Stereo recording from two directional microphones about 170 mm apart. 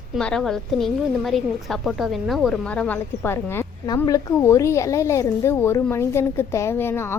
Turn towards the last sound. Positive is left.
turn(degrees=15)  # may be behind; listen again after turning